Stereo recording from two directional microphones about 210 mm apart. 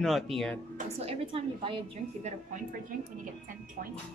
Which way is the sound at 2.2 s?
40° right (ahead or behind).